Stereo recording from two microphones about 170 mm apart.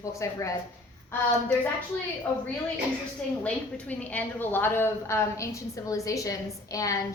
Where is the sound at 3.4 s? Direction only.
10° left (ahead or behind).